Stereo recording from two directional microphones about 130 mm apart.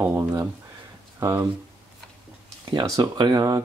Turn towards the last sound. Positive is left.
turn(degrees=-30)  # may be behind; listen again after turning